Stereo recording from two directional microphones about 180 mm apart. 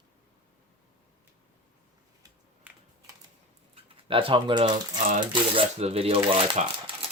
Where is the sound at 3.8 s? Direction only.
30° right (ahead or behind).